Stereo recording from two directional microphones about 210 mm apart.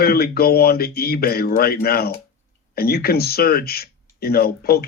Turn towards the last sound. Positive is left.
turn(degrees=45)  # may be behind; listen again after turning